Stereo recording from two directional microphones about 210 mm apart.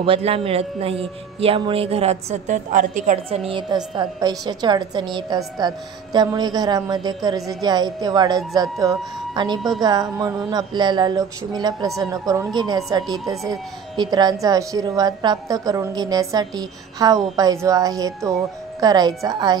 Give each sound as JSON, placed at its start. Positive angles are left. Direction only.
{"t": 0.0, "sound": "a man's voice", "side_deg": -25}